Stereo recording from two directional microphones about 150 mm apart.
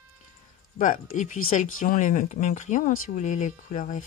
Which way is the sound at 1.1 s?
55° left (ahead or behind).